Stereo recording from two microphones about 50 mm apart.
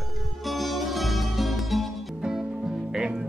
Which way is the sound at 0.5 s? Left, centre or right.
Centre.